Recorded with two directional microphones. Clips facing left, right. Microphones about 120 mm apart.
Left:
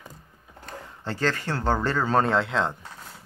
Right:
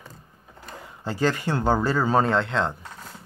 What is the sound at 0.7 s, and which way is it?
Speech, 10° right (ahead or behind).